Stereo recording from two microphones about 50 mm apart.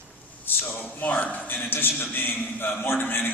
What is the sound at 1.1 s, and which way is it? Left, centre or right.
A man's voice, left.